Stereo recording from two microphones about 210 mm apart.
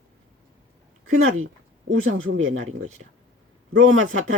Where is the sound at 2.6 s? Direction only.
35° right (ahead or behind).